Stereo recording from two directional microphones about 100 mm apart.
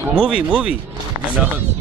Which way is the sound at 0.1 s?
10° right (ahead or behind).